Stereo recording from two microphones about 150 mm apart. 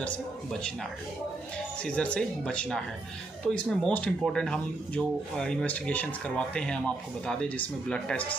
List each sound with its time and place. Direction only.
0.0 s speech: 5° left (ahead or behind)
1.8 s speech: 10° left (ahead or behind)